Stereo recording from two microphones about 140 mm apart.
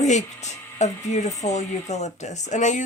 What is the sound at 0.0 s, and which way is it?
Speech, 55° left (ahead or behind).